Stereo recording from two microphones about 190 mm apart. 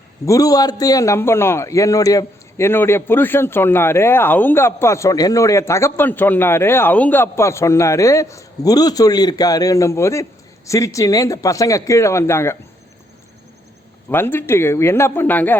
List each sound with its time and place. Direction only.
0.3 s a man's voice: 20° left (ahead or behind)
14.1 s a man's voice: 10° left (ahead or behind)